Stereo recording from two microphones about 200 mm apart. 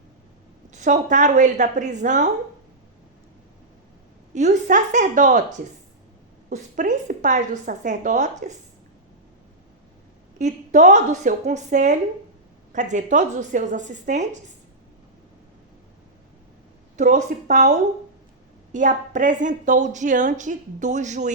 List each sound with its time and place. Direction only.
0.7 s a woman's voice: 35° right (ahead or behind)
4.4 s a woman's voice: 35° right (ahead or behind)
10.3 s a woman's voice: 35° right (ahead or behind)
17.0 s a woman's voice: 40° right (ahead or behind)